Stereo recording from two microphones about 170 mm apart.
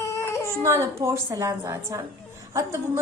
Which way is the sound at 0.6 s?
15° right (ahead or behind).